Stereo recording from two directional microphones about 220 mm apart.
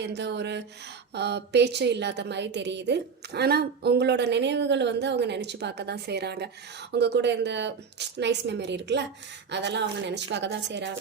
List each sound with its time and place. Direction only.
0.0 s a woman's voice: 50° right (ahead or behind)